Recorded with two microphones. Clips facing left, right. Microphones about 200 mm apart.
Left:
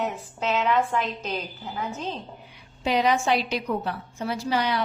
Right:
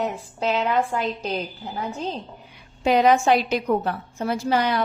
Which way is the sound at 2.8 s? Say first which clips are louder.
Right 5 dB; 50° right (ahead or behind).